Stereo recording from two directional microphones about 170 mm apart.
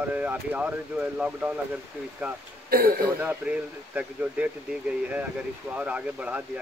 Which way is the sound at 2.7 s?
60° right (ahead or behind).